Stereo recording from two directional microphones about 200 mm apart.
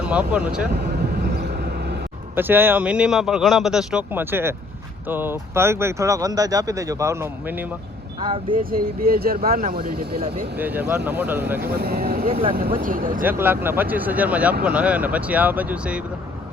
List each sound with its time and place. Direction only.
0.0 s speech: 5° right (ahead or behind)
0.7 s vehicle: 50° right (ahead or behind)
2.3 s speech: 10° right (ahead or behind)
8.2 s speech: 25° right (ahead or behind)
8.5 s speech: 45° right (ahead or behind)
10.6 s speech: 10° right (ahead or behind)
11.7 s speech: 50° right (ahead or behind)
13.4 s speech: 10° right (ahead or behind)